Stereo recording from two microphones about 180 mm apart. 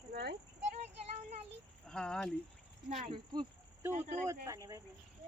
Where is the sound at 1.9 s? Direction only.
5° left (ahead or behind).